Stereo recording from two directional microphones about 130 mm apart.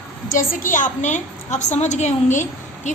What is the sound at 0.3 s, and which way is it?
A woman's voice, 85° left.